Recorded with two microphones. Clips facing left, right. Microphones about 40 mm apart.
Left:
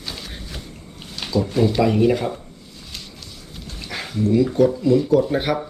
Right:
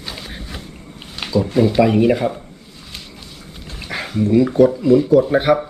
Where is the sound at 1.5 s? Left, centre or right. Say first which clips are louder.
Right 4 dB; centre.